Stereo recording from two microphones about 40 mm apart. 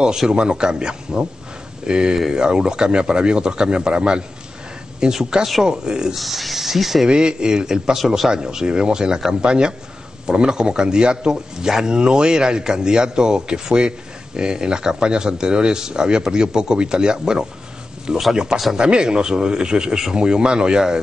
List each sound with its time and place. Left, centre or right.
0.3 s speech: right
2.1 s speech: centre
2.4 s speech: centre
6.1 s speech: centre
7.1 s speech: right